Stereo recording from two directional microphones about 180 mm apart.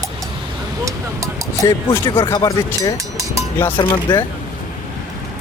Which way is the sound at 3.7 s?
25° left (ahead or behind).